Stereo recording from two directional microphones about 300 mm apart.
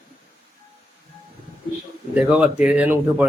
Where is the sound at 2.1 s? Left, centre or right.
Centre.